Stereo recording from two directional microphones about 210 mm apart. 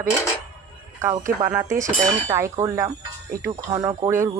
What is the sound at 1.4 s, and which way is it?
Speech, 10° right (ahead or behind).